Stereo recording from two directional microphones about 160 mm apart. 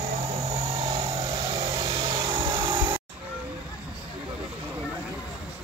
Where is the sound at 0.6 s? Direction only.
20° right (ahead or behind).